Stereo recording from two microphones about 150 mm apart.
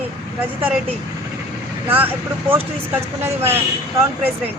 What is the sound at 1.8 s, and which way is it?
Speech, 10° right (ahead or behind).